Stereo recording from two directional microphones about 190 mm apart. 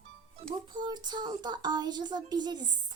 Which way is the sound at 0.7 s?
25° right (ahead or behind).